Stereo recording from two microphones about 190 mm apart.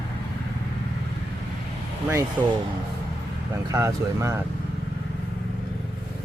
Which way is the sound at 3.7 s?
15° right (ahead or behind).